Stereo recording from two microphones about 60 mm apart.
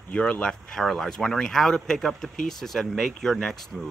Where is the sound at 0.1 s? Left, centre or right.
Left.